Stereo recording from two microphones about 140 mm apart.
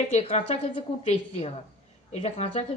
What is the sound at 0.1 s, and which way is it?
Speech, 45° left (ahead or behind).